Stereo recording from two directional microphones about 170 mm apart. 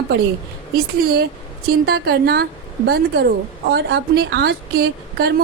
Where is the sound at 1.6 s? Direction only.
65° right (ahead or behind).